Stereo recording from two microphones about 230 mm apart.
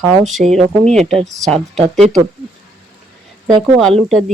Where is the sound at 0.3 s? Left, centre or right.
Centre.